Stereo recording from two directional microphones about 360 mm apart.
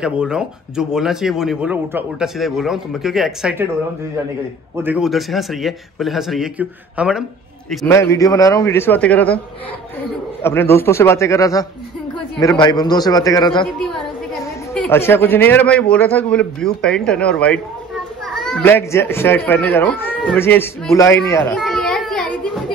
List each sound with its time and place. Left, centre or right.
0.0 s speech: centre
4.7 s a man's voice: centre
10.4 s a man's voice: centre
14.7 s speech: centre
21.3 s children playing: centre